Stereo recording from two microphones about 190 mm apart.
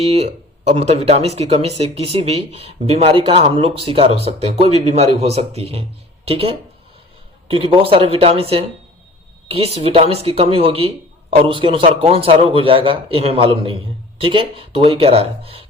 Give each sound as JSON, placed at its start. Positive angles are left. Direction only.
{"t": 0.0, "sound": "speech", "side_deg": -30}